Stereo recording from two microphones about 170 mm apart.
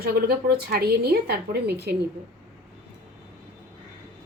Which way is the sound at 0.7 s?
70° right (ahead or behind).